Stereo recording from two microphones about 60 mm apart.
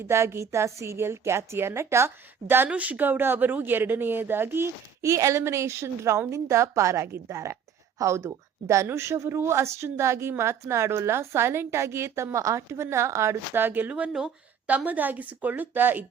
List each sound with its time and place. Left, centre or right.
0.1 s a woman's voice: right
2.6 s speech: right
5.0 s a woman's voice: right
13.5 s a woman's voice: right